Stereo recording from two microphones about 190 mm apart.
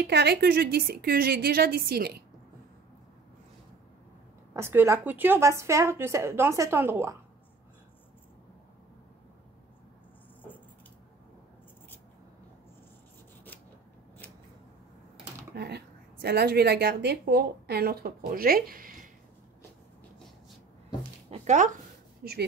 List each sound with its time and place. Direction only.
0.0 s a woman's voice: 60° right (ahead or behind)
4.6 s a woman's voice: 15° right (ahead or behind)
15.5 s a woman's voice: 60° right (ahead or behind)
21.3 s a sound: 40° right (ahead or behind)
22.2 s speech: 55° right (ahead or behind)